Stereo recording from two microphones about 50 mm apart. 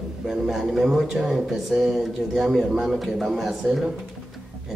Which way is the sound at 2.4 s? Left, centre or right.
Right.